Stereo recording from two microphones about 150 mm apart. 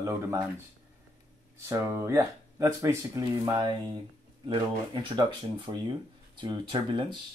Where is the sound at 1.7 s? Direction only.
15° right (ahead or behind).